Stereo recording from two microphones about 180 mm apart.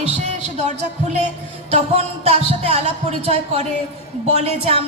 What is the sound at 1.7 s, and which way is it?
A woman's voice, 35° right (ahead or behind).